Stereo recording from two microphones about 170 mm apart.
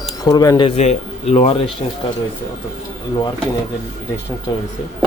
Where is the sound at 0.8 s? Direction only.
40° left (ahead or behind).